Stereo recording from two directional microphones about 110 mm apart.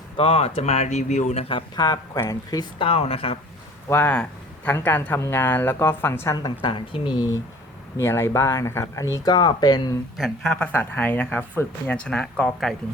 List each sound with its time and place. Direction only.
0.2 s speech: 65° left (ahead or behind); by 1.5 s 85° left
1.5 s speech: 45° left (ahead or behind)
2.1 s speech: 30° left (ahead or behind)
2.7 s speech: 60° left (ahead or behind)
3.8 s speech: 20° left (ahead or behind)
6.6 s speech: 55° left (ahead or behind)
7.9 s speech: 25° left (ahead or behind)
9.3 s speech: 40° left (ahead or behind)
10.2 s speech: centre (ahead or behind)